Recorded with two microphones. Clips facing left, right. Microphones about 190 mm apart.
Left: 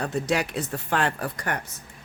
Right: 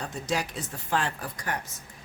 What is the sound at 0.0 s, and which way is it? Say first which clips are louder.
Speech: left 5 dB; 65° left (ahead or behind).